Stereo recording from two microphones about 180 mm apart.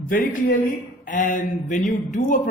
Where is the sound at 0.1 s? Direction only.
50° left (ahead or behind).